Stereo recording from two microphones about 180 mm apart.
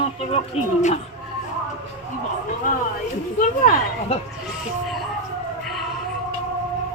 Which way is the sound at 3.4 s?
45° left (ahead or behind).